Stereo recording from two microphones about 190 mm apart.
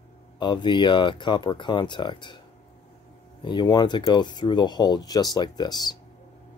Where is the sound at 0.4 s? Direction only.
25° left (ahead or behind).